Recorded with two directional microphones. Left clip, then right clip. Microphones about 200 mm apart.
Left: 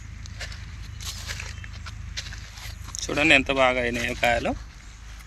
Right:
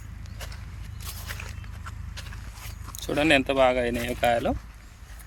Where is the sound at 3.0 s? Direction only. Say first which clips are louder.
Left 3 dB; 10° right (ahead or behind).